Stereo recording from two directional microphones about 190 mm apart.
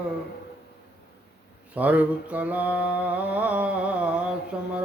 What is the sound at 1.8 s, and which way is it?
Mantra, 10° right (ahead or behind).